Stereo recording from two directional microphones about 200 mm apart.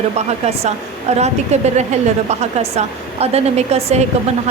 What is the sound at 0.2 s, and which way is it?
A woman's voice, 35° right (ahead or behind).